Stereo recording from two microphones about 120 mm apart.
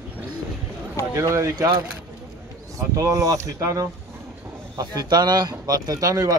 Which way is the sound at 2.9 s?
25° right (ahead or behind).